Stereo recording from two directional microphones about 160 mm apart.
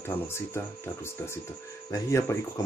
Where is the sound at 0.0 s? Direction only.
15° left (ahead or behind).